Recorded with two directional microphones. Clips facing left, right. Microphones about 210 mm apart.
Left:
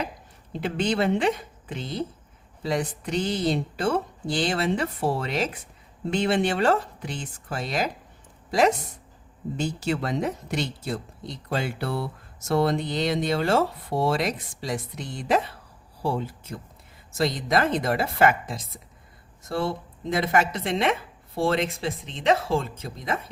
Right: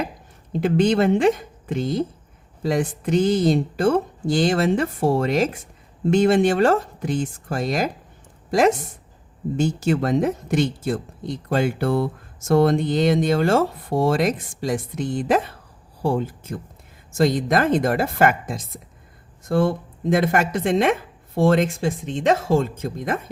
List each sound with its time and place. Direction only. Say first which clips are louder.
0.5 s a woman's voice: right 7 dB; 45° right (ahead or behind)